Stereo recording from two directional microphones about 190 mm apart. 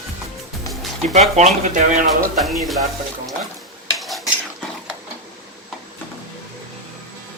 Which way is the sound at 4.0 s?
Centre (ahead or behind).